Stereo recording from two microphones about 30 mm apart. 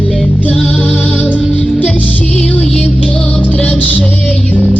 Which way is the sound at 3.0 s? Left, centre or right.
Centre.